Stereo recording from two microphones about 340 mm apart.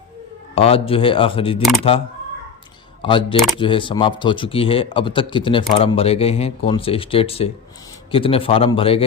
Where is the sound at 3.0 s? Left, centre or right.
Centre.